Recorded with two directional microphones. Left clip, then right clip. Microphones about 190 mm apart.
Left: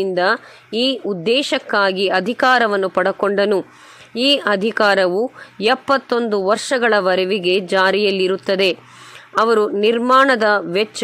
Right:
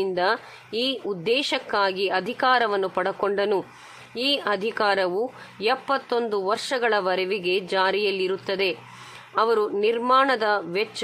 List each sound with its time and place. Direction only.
0.0 s a woman's voice: 25° left (ahead or behind)